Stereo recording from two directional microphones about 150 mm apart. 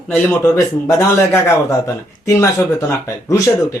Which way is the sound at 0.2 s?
20° left (ahead or behind).